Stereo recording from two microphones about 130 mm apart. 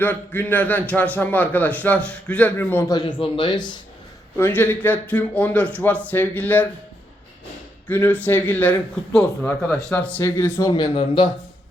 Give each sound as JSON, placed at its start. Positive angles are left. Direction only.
{"t": 0.0, "sound": "a man's voice", "side_deg": 15}
{"t": 2.9, "sound": "speech", "side_deg": 35}
{"t": 4.4, "sound": "a man's voice", "side_deg": 15}
{"t": 7.9, "sound": "a man's voice", "side_deg": 10}
{"t": 10.7, "sound": "speech", "side_deg": 35}